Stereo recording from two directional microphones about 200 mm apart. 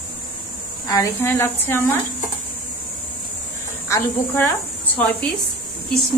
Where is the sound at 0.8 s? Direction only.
15° left (ahead or behind).